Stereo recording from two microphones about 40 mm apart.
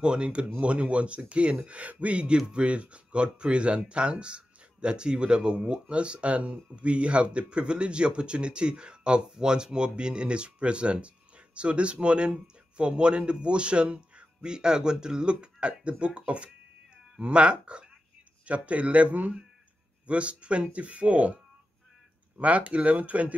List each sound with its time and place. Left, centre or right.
0.0 s speech: right
2.1 s speech: right
22.4 s speech: right